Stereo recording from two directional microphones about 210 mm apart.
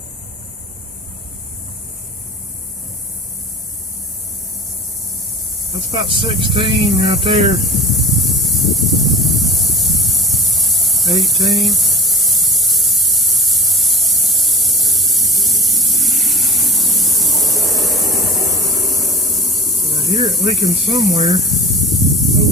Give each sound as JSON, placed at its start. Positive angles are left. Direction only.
{"t": 6.1, "sound": "speech", "side_deg": -25}
{"t": 7.6, "sound": "hiss", "side_deg": 0}
{"t": 16.2, "sound": "spray", "side_deg": 0}
{"t": 17.7, "sound": "a sound", "side_deg": 0}
{"t": 21.2, "sound": "snake", "side_deg": 0}